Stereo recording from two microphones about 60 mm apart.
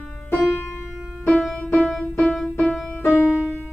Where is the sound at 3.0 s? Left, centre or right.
Left.